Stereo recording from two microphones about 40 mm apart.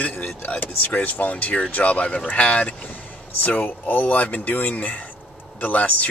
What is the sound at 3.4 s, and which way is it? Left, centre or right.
Speech, left.